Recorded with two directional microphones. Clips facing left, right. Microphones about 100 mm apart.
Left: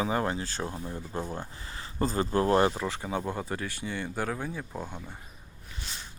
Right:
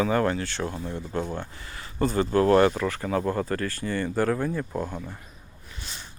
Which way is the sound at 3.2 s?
Centre (ahead or behind).